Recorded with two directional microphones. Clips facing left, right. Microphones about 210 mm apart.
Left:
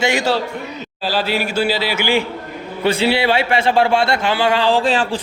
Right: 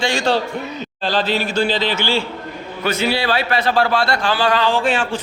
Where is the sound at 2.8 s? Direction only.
30° left (ahead or behind).